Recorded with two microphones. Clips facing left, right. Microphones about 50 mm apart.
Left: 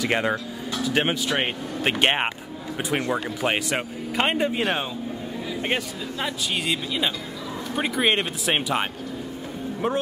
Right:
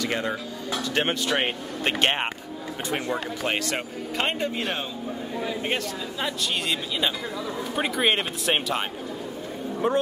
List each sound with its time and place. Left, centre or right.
0.1 s speech: left
0.8 s speech: centre
2.0 s speech: centre
6.2 s speech: centre
9.8 s speech: centre